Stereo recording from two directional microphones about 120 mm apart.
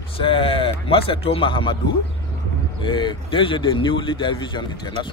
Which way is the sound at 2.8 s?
40° left (ahead or behind).